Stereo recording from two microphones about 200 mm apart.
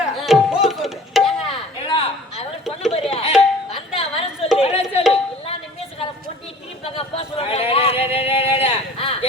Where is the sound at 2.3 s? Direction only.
Centre (ahead or behind).